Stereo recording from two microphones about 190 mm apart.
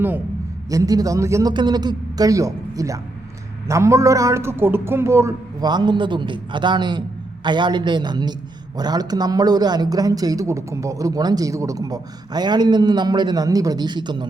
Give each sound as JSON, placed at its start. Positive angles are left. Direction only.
{"t": 0.7, "sound": "a man's voice", "side_deg": -20}